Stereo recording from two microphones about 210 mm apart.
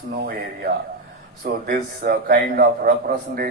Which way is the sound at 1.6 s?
45° right (ahead or behind).